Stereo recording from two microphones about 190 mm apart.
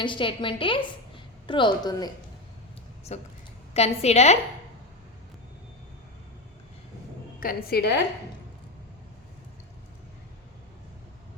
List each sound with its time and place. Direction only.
0.0 s a woman's voice: 25° left (ahead or behind)
3.1 s a woman's voice: 35° left (ahead or behind)
7.3 s a woman's voice: 50° left (ahead or behind)